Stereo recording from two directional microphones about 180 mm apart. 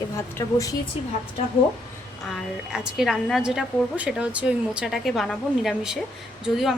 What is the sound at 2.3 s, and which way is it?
A woman's voice, centre (ahead or behind).